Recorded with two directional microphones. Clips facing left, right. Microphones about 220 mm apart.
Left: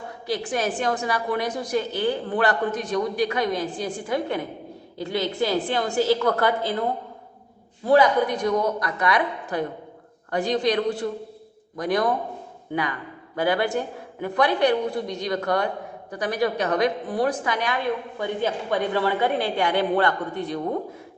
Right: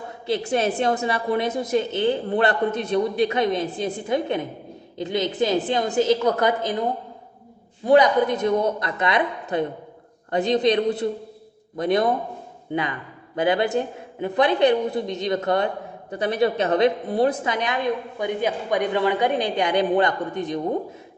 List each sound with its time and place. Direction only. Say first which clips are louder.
0.3 s a man's voice: right 3 dB; 25° right (ahead or behind)
13.3 s a man's voice: right 2 dB; 20° right (ahead or behind)